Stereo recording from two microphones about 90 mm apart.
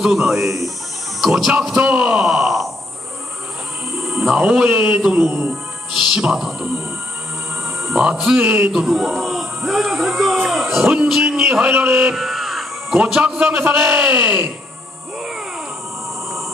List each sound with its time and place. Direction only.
0.0 s music: 5° right (ahead or behind)
1.9 s speech: 15° right (ahead or behind)
4.0 s speech: 5° right (ahead or behind)
7.9 s speech: 10° right (ahead or behind)
8.7 s a man's voice: 5° right (ahead or behind)
11.7 s speech: 20° right (ahead or behind)
12.2 s caw: centre (ahead or behind)
13.0 s speech: 10° right (ahead or behind)